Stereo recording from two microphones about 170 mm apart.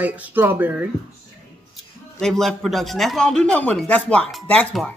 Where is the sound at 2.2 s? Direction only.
Centre (ahead or behind).